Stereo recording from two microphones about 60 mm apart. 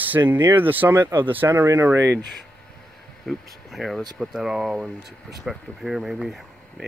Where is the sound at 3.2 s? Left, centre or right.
Centre.